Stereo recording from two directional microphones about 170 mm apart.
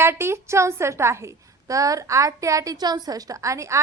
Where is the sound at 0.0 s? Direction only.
15° right (ahead or behind).